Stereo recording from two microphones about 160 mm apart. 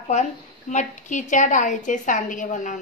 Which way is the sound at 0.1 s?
45° left (ahead or behind).